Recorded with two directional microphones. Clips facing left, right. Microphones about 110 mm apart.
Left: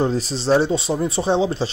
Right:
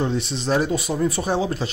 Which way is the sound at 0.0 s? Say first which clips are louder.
Left 3 dB; 35° left (ahead or behind).